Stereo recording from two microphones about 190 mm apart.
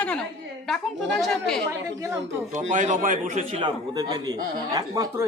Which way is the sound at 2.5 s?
40° right (ahead or behind).